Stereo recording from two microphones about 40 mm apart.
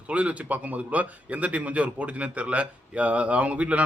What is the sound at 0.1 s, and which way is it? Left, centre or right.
A man's voice, right.